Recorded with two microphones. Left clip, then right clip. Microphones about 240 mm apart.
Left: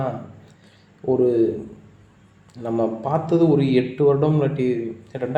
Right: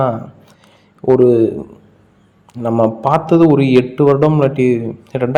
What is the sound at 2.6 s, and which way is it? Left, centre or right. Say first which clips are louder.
A man's voice: right 9 dB; right.